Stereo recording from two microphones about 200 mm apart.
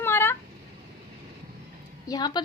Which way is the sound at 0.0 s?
10° left (ahead or behind).